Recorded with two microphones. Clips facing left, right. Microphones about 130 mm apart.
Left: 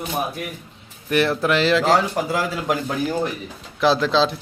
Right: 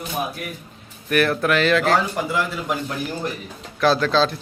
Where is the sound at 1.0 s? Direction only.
25° left (ahead or behind).